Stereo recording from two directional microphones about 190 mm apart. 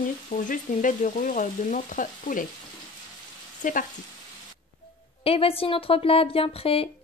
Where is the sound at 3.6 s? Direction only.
45° left (ahead or behind).